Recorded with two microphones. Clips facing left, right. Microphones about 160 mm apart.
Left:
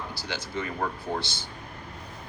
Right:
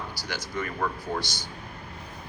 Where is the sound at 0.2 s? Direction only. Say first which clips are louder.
Left 1 dB; 25° left (ahead or behind).